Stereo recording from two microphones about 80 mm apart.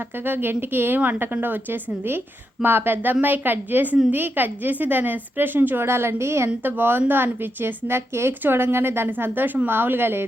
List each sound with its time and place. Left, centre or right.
0.3 s speech: right